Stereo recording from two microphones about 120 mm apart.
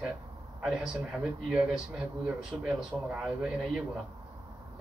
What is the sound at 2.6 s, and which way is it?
A man's voice, 5° right (ahead or behind).